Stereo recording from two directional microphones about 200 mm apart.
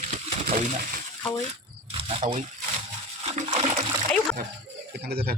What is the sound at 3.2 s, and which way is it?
Splash, 30° right (ahead or behind).